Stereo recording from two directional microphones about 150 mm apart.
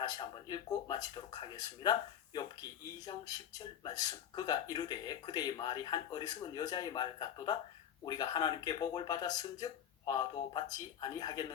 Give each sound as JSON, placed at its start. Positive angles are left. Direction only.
{"t": 0.0, "sound": "speech", "side_deg": 25}